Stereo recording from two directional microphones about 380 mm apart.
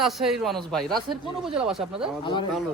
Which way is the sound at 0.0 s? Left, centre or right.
Centre.